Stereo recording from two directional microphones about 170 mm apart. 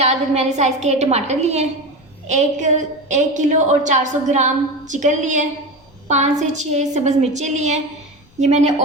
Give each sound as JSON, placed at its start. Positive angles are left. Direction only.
{"t": 0.0, "sound": "a woman's voice", "side_deg": -40}